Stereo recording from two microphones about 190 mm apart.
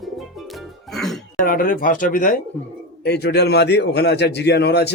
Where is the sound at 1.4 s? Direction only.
50° left (ahead or behind).